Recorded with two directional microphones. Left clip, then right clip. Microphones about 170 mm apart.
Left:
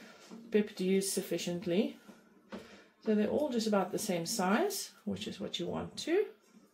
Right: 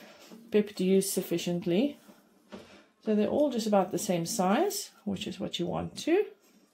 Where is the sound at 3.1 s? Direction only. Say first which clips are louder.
Right 5 dB; 50° right (ahead or behind).